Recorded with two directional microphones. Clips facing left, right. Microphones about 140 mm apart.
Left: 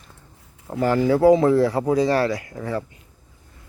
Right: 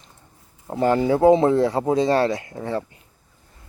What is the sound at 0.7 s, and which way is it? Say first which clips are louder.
Speech: even; 25° right (ahead or behind).